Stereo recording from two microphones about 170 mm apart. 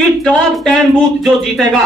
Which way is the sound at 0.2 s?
5° left (ahead or behind).